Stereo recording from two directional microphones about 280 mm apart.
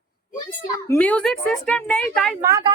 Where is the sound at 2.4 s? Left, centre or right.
Centre.